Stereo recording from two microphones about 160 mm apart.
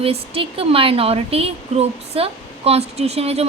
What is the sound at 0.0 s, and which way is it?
A woman's voice, 35° right (ahead or behind).